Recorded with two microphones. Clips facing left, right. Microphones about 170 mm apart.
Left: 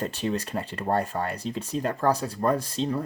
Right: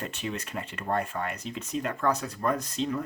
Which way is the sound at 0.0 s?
35° left (ahead or behind).